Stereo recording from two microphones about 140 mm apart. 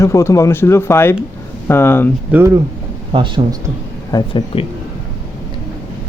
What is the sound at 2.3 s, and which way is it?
Speech, 20° right (ahead or behind).